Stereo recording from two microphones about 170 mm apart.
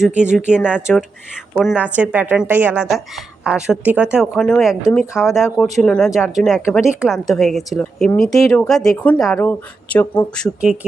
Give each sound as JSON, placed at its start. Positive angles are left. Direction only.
{"t": 0.1, "sound": "speech", "side_deg": -45}
{"t": 0.3, "sound": "a woman's voice", "side_deg": -5}